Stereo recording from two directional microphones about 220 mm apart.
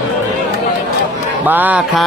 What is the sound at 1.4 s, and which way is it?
Speech, 10° right (ahead or behind).